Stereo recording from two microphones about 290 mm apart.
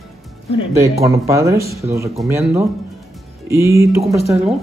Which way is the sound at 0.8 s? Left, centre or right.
Centre.